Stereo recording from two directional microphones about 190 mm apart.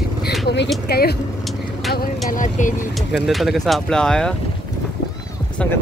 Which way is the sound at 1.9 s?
45° left (ahead or behind).